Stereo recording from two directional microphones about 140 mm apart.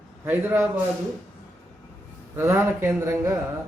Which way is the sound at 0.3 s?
15° right (ahead or behind).